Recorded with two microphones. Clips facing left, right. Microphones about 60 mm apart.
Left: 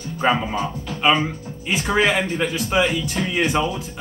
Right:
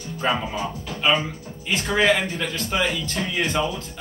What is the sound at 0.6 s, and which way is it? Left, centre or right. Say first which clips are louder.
Speech: left 3 dB; centre.